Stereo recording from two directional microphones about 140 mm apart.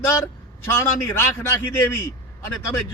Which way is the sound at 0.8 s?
15° left (ahead or behind).